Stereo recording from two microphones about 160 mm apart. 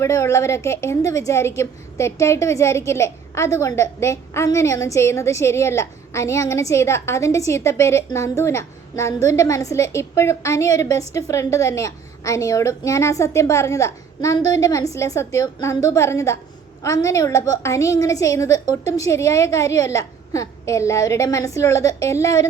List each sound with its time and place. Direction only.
0.0 s a woman's voice: 20° left (ahead or behind)